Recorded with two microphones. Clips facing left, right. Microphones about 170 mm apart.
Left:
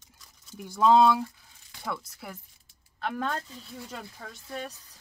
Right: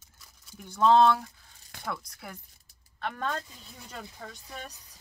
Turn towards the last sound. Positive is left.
turn(degrees=5)  # may be behind; listen again after turning